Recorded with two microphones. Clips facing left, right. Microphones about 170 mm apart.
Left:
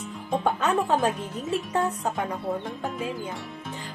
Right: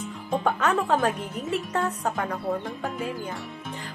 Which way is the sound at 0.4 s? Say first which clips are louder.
Even; 20° left (ahead or behind).